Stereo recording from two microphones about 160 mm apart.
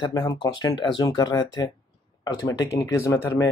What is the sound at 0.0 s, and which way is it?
Speech, 25° left (ahead or behind).